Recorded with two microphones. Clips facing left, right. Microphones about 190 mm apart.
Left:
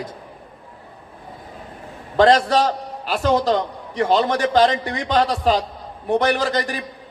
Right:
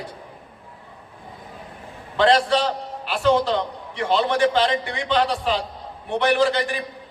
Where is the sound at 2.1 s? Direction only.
40° left (ahead or behind).